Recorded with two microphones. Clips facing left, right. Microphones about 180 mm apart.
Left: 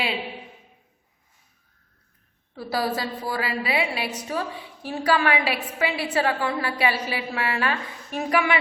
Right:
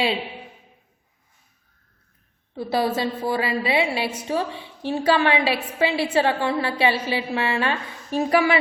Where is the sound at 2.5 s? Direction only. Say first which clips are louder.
Right 4 dB; 25° right (ahead or behind).